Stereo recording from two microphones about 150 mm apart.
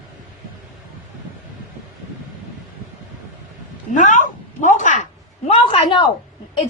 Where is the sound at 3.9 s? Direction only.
55° left (ahead or behind); by 6.1 s 35° left (ahead or behind).